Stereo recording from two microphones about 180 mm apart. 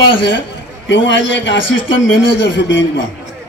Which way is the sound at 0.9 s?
90° left.